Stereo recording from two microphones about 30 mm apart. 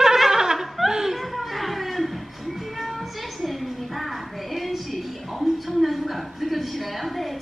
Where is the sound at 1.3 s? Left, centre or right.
Centre.